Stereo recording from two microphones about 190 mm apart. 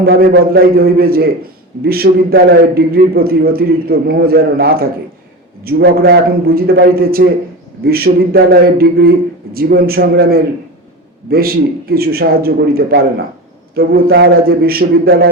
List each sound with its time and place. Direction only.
0.0 s a man's voice: 50° right (ahead or behind)